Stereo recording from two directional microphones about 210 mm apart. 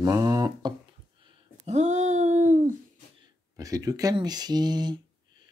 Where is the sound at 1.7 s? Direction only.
35° right (ahead or behind).